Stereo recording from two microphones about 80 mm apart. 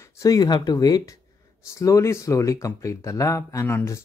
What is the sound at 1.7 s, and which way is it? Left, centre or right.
Speech, left.